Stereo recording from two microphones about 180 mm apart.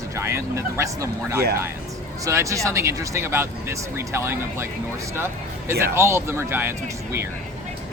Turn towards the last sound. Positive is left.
turn(degrees=-10)  # may be behind; listen again after turning